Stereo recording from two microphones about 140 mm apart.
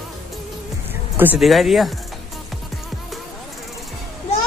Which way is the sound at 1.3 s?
Centre (ahead or behind).